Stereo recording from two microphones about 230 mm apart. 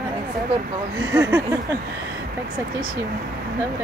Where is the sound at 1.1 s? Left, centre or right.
Centre.